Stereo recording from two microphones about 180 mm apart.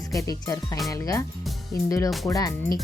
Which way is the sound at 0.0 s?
20° left (ahead or behind).